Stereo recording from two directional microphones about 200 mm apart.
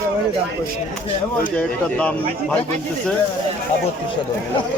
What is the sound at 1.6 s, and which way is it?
Speech, 5° left (ahead or behind).